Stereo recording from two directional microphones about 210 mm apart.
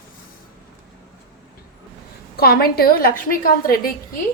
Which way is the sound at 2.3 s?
45° left (ahead or behind).